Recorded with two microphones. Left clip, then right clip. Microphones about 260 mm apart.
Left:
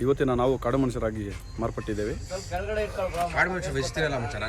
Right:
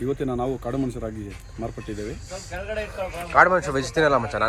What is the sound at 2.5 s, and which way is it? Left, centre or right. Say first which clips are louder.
Speech: left 1 dB; left.